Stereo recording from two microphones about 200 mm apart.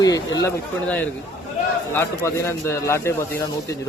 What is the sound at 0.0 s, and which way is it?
Speech, 15° left (ahead or behind).